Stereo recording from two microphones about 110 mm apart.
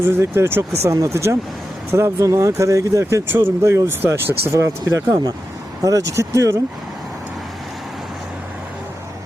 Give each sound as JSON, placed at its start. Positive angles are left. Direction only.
{"t": 0.0, "sound": "speech", "side_deg": -25}